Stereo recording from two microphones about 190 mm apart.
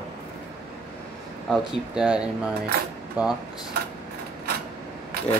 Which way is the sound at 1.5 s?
5° right (ahead or behind).